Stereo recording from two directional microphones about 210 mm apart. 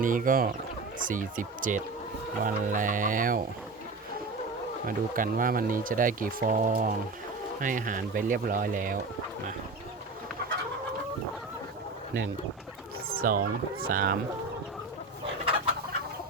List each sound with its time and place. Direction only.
0.0 s speech: 40° right (ahead or behind)
4.9 s speech: 40° right (ahead or behind)
13.1 s speech: 45° right (ahead or behind)